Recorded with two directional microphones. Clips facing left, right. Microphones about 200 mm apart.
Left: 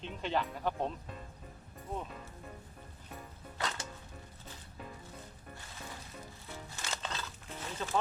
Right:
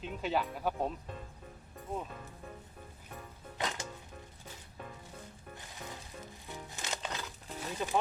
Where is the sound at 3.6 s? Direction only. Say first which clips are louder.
Right 2 dB; 15° right (ahead or behind).